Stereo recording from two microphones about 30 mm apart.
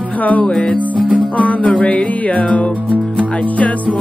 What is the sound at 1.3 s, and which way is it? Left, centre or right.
Music, left.